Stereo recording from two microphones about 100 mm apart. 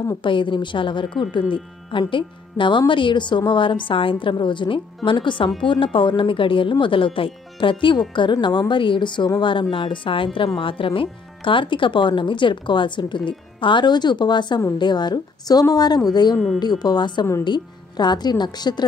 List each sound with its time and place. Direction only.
0.2 s speech: 55° left (ahead or behind)